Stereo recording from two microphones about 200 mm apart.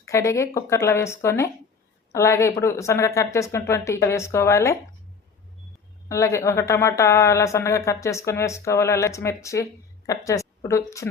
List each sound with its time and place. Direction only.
0.0 s a woman's voice: 15° left (ahead or behind)
6.1 s a woman's voice: 15° left (ahead or behind)